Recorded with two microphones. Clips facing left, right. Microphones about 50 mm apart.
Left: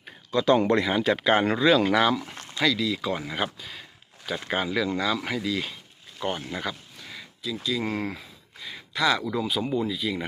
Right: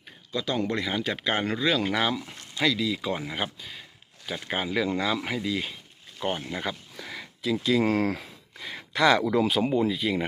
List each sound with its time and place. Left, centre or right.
0.3 s speech: left
0.8 s speech: centre
1.8 s speech: centre
4.9 s speech: right
7.2 s speech: right
8.9 s speech: right
9.6 s speech: right